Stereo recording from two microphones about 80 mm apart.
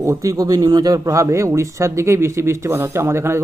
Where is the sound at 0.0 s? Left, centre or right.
Right.